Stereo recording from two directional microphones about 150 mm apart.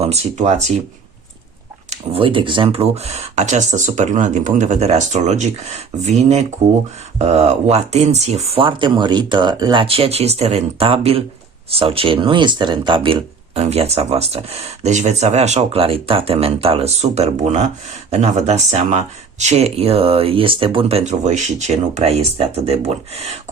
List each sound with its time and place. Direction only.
0.0 s speech: 45° right (ahead or behind)
1.9 s speech: 35° right (ahead or behind)
9.8 s speech: 40° right (ahead or behind)